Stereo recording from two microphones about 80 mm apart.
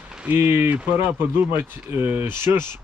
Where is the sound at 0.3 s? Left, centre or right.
Right.